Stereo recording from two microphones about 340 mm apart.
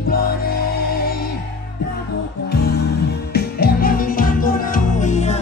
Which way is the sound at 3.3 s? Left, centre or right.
Left.